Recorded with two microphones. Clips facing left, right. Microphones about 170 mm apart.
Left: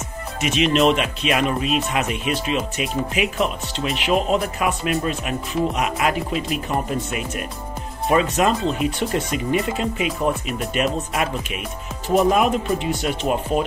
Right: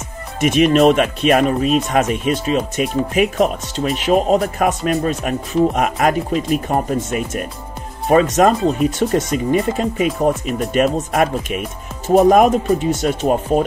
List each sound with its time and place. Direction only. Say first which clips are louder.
0.7 s speech: right 5 dB; 50° right (ahead or behind)
12.1 s speech: right 6 dB; 45° right (ahead or behind)